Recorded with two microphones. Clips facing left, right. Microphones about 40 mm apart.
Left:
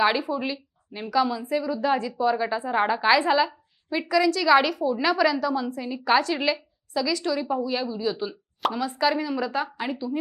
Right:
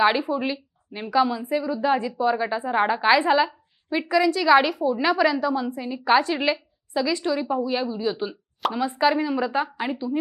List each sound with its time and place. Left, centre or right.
0.0 s a woman's voice: centre
8.8 s speech: right